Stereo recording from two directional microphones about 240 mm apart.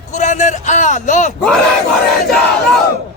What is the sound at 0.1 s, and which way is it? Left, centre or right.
A man's voice, left.